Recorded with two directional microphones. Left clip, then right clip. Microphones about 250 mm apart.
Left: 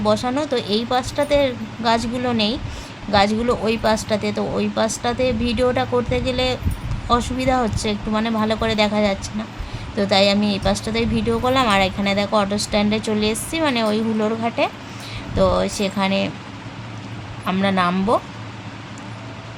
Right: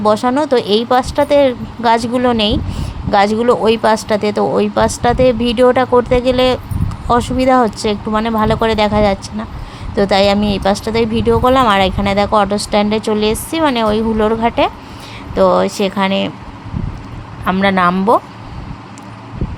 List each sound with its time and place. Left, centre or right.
0.0 s a woman's voice: centre
17.4 s a woman's voice: centre